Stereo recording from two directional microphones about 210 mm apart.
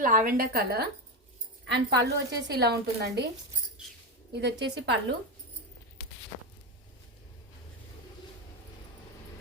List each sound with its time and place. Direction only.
0.0 s a woman's voice: 40° right (ahead or behind)
4.3 s a woman's voice: 55° right (ahead or behind)